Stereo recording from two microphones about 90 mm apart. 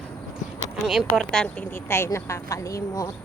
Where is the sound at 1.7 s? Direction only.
25° left (ahead or behind).